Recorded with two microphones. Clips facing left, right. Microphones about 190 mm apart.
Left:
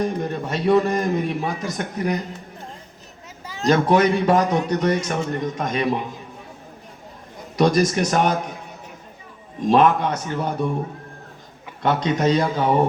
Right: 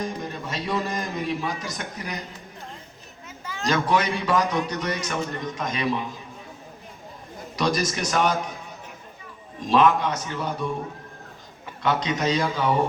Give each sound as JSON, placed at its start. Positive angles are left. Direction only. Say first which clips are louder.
{"t": 0.0, "sound": "a man's voice", "louder": "left 7 dB", "side_deg": 60}
{"t": 3.7, "sound": "a man's voice", "louder": "left 6 dB", "side_deg": 50}
{"t": 7.5, "sound": "a man's voice", "louder": "left 7 dB", "side_deg": 55}
{"t": 9.6, "sound": "a man's voice", "louder": "left 3 dB", "side_deg": 55}
{"t": 11.8, "sound": "a man's voice", "louder": "left 4 dB", "side_deg": 50}